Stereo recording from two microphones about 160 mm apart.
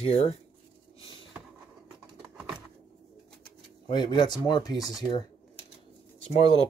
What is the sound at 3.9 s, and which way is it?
Speech, 30° left (ahead or behind).